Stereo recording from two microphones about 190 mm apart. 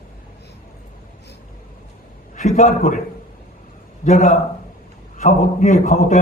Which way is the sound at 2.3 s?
35° left (ahead or behind).